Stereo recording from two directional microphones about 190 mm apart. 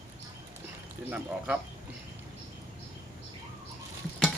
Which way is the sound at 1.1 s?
5° right (ahead or behind).